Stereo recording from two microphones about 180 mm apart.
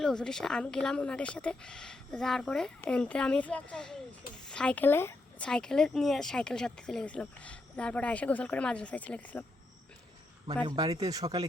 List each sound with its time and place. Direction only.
0.0 s speech: 5° left (ahead or behind)
10.4 s speech: 25° right (ahead or behind)